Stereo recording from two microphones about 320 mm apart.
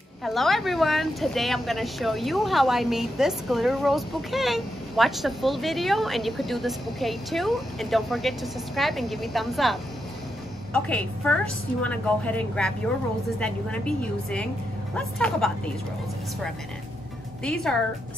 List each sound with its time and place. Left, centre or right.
0.2 s speech: centre
17.4 s speech: centre